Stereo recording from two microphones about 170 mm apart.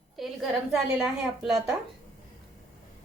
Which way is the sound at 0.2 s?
Centre (ahead or behind).